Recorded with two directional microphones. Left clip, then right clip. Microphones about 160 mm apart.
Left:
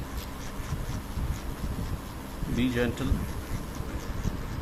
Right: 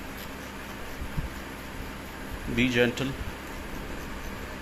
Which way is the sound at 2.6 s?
20° right (ahead or behind).